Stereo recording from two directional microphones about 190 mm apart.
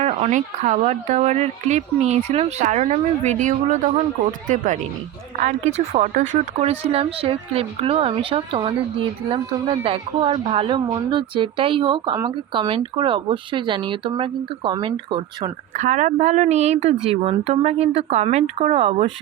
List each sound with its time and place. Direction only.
0.0 s a woman's voice: 35° right (ahead or behind)
15.8 s speech: 40° right (ahead or behind)